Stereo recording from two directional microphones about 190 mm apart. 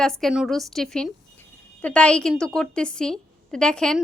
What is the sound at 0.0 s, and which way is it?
A woman's voice, centre (ahead or behind).